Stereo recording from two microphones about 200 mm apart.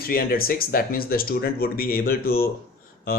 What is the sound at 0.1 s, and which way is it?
Speech, 45° left (ahead or behind).